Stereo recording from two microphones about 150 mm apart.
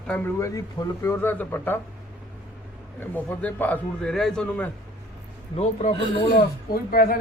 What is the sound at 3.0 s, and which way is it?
A man's voice, 10° left (ahead or behind).